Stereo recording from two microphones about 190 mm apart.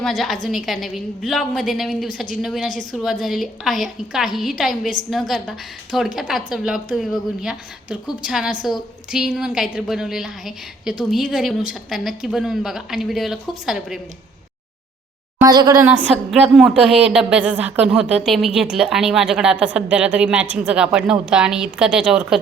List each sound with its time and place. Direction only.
0.0 s a woman's voice: centre (ahead or behind)
15.4 s speech: 20° right (ahead or behind)
16.0 s a woman's voice: centre (ahead or behind)